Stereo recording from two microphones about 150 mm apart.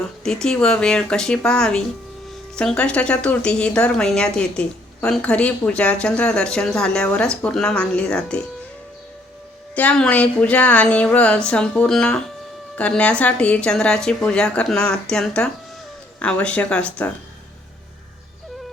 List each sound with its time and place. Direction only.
0.3 s a woman's voice: 5° left (ahead or behind)
9.7 s a woman's voice: 10° left (ahead or behind)